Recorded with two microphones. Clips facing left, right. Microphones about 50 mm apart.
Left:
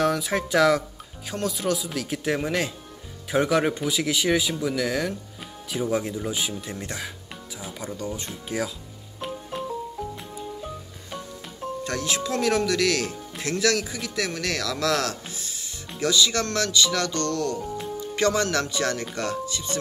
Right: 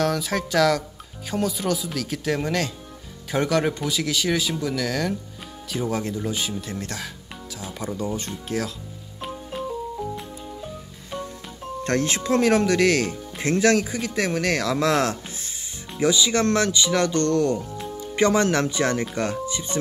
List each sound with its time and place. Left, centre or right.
0.0 s speech: centre
1.3 s speech: centre
7.9 s speech: centre
8.2 s speech: centre
11.8 s speech: right